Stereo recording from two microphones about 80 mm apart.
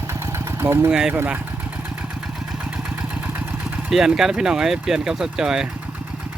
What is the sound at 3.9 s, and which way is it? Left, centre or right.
Speech, centre.